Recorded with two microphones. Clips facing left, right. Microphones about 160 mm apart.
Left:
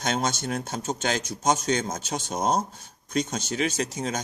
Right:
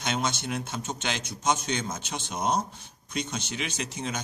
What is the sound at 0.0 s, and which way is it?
A man's voice, 45° left (ahead or behind).